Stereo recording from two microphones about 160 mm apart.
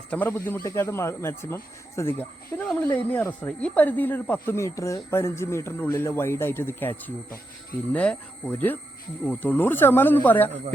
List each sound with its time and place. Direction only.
0.1 s speech: 10° left (ahead or behind)